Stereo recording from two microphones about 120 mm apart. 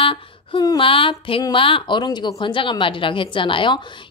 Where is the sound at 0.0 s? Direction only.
45° left (ahead or behind).